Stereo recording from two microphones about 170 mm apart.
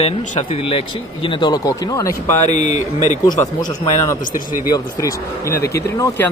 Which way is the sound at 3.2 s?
25° left (ahead or behind).